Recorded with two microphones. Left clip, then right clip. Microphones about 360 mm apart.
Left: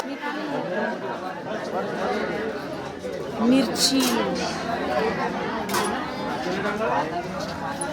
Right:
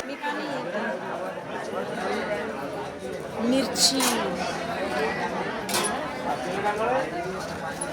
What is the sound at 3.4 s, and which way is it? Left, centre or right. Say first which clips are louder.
Speech: left 2 dB; centre.